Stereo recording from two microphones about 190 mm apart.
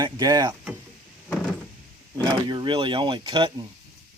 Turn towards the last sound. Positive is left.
turn(degrees=-20)  # may be behind; listen again after turning